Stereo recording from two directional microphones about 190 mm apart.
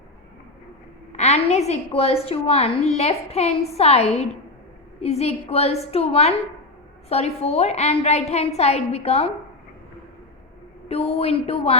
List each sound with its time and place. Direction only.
1.1 s a woman's voice: 35° left (ahead or behind)
10.8 s a woman's voice: 30° left (ahead or behind)